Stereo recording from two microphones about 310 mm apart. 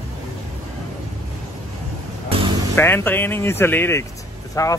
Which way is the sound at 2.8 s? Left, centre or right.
Centre.